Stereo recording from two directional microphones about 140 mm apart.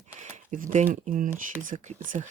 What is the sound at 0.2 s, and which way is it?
Speech, 60° right (ahead or behind).